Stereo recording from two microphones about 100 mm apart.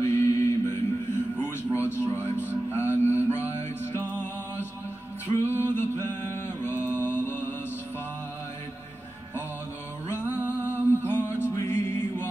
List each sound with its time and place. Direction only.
0.0 s music: 25° left (ahead or behind)
5.4 s mantra: 25° left (ahead or behind)
10.0 s music: 20° left (ahead or behind)
10.4 s a sound: 20° right (ahead or behind)
11.1 s music: 20° left (ahead or behind)